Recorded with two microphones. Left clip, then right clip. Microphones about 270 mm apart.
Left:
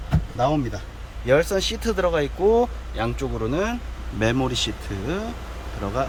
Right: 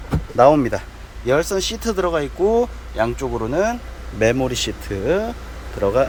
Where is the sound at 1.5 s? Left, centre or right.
Centre.